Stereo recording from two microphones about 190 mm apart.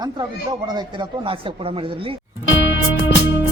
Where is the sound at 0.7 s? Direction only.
25° right (ahead or behind).